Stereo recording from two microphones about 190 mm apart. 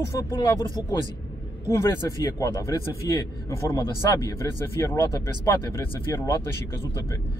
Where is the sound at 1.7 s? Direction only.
15° left (ahead or behind).